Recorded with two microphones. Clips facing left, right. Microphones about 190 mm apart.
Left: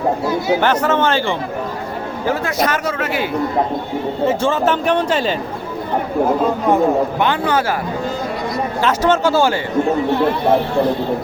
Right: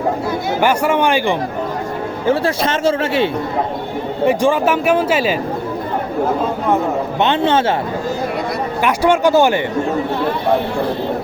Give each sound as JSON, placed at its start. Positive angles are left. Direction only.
{"t": 0.6, "sound": "speech", "side_deg": -10}
{"t": 2.2, "sound": "a man's voice", "side_deg": -30}
{"t": 4.3, "sound": "speech", "side_deg": -15}
{"t": 7.2, "sound": "a man's voice", "side_deg": -25}
{"t": 8.8, "sound": "speech", "side_deg": -15}